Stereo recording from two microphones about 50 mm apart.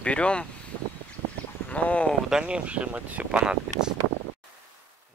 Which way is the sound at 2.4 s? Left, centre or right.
Right.